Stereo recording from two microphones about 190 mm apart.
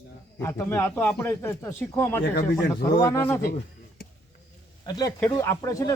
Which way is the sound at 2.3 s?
55° left (ahead or behind).